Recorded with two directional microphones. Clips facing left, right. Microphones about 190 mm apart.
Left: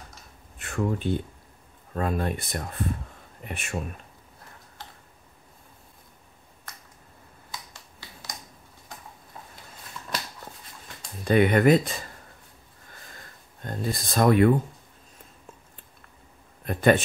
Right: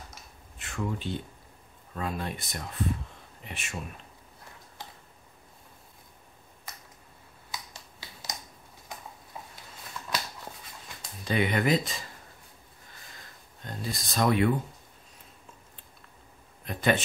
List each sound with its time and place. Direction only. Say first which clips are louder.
0.6 s speech: left 6 dB; 50° left (ahead or behind)
11.2 s speech: left 7 dB; 55° left (ahead or behind)
13.6 s speech: left 6 dB; 50° left (ahead or behind)
16.6 s speech: left 6 dB; 50° left (ahead or behind)